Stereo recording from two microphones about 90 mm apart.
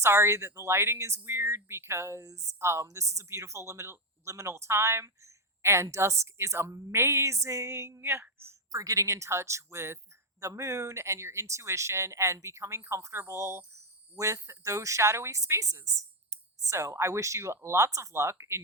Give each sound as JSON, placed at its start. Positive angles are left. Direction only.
{"t": 0.0, "sound": "speech", "side_deg": -30}
{"t": 8.7, "sound": "speech", "side_deg": -40}